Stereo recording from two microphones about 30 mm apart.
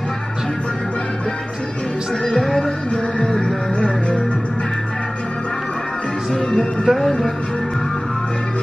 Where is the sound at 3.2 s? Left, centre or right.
Left.